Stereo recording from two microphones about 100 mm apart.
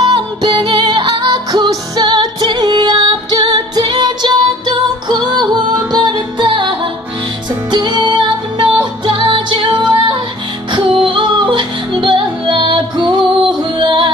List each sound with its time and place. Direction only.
0.1 s music: 50° right (ahead or behind)